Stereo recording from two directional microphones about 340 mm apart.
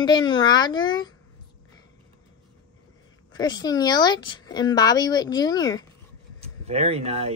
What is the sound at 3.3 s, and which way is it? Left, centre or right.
A woman's voice, centre.